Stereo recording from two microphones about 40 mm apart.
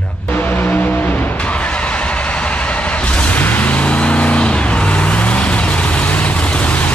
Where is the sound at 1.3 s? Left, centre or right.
Left.